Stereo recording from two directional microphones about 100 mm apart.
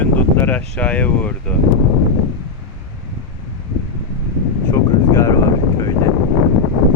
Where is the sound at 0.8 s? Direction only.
15° left (ahead or behind).